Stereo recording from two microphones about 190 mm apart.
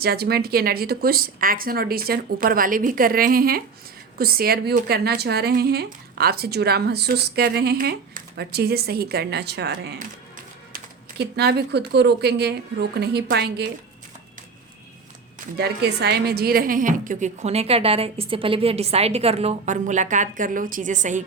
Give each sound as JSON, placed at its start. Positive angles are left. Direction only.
{"t": 0.0, "sound": "speech", "side_deg": -55}
{"t": 10.0, "sound": "music", "side_deg": -45}
{"t": 11.2, "sound": "speech", "side_deg": -60}
{"t": 15.5, "sound": "a woman's voice", "side_deg": -60}